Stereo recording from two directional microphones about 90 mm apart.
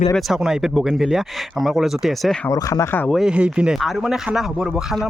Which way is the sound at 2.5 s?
40° left (ahead or behind).